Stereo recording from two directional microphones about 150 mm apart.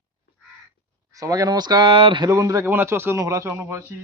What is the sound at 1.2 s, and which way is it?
Speech, 25° right (ahead or behind).